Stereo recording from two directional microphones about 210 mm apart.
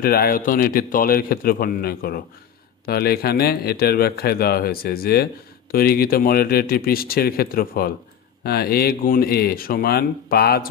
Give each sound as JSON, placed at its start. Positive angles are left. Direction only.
{"t": 0.0, "sound": "a man's voice", "side_deg": 45}